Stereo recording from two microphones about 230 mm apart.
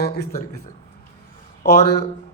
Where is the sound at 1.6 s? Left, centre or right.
Left.